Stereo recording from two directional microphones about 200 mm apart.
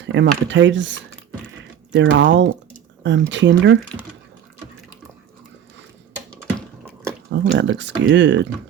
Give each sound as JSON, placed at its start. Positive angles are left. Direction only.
{"t": 0.0, "sound": "speech", "side_deg": -65}
{"t": 7.3, "sound": "speech", "side_deg": -65}